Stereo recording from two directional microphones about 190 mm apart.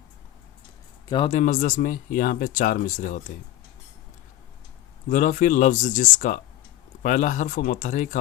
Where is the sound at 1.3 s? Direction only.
45° left (ahead or behind).